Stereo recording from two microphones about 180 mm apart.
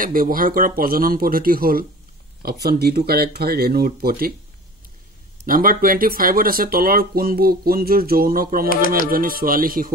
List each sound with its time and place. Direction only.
0.0 s speech: 50° right (ahead or behind)
5.5 s speech: 50° right (ahead or behind)
8.6 s speech: 50° left (ahead or behind)
9.1 s speech: 55° right (ahead or behind)